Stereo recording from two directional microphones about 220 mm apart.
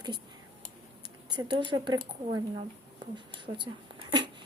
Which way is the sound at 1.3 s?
20° right (ahead or behind).